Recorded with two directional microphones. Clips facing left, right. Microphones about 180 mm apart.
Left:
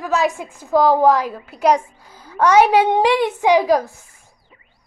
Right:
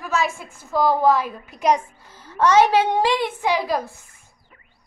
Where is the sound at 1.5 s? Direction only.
70° left (ahead or behind).